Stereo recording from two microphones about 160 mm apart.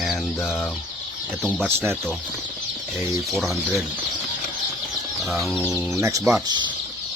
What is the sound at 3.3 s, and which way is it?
Speech, centre (ahead or behind).